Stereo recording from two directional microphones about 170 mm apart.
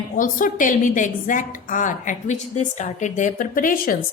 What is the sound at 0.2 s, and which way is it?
A woman's voice, 55° left (ahead or behind).